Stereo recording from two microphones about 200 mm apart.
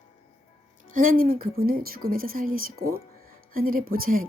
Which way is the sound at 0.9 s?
45° right (ahead or behind).